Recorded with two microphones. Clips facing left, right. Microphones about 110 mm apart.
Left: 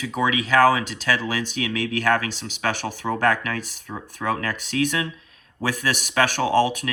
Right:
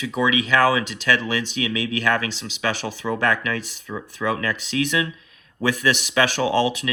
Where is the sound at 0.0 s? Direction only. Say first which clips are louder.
Right 2 dB; 45° left (ahead or behind).